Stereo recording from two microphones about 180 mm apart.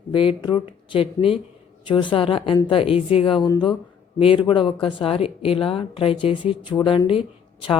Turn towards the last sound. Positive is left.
turn(degrees=30)  # may be behind; listen again after turning